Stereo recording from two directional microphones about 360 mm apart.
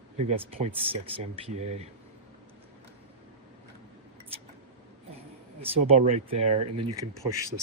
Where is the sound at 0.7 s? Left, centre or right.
Centre.